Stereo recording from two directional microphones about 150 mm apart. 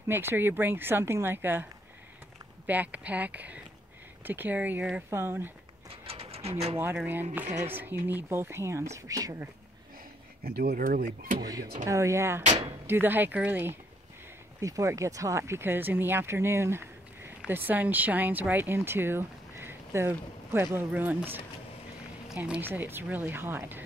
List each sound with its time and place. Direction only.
0.1 s speech: 15° right (ahead or behind)
5.9 s mechanisms: 40° right (ahead or behind)
6.8 s speech: 15° right (ahead or behind)
10.4 s speech: 90° right
11.8 s speech: 20° right (ahead or behind)